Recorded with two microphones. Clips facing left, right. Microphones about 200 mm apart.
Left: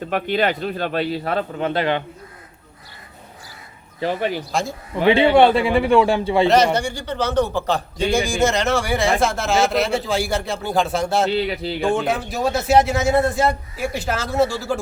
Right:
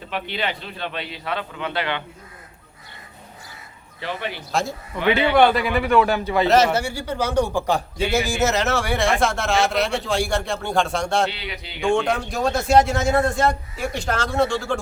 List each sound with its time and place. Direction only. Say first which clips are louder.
0.1 s speech: left 7 dB; 45° left (ahead or behind)
4.0 s speech: left 7 dB; 40° left (ahead or behind)
4.9 s speech: left 3 dB; 30° left (ahead or behind)
6.7 s a man's voice: left 1 dB; 5° right (ahead or behind)
11.3 s speech: left 12 dB; 45° left (ahead or behind)
11.9 s a man's voice: even; 5° left (ahead or behind)